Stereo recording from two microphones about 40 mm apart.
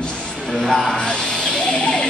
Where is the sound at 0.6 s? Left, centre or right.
Centre.